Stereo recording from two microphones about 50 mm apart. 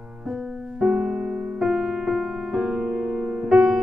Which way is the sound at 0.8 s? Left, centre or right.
Centre.